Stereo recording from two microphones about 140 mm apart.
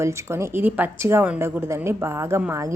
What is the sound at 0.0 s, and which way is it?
A woman's voice, 20° right (ahead or behind).